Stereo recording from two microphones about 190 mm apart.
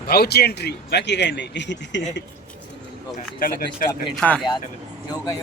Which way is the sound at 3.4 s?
50° left (ahead or behind).